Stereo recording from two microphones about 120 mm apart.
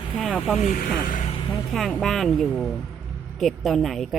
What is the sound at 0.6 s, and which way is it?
Speech, 90° left.